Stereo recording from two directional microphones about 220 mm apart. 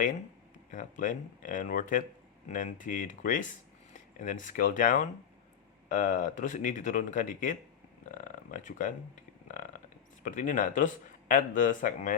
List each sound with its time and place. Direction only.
0.7 s speech: 35° left (ahead or behind)
9.5 s burping: 35° left (ahead or behind)
10.2 s speech: 35° left (ahead or behind)